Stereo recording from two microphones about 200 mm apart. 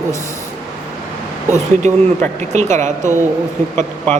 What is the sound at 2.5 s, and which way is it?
Speech, 35° right (ahead or behind).